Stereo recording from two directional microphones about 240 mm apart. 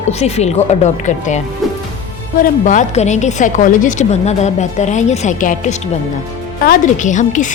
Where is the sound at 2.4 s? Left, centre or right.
Left.